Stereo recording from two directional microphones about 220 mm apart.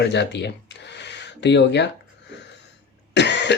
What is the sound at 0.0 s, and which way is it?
Speech, 50° left (ahead or behind).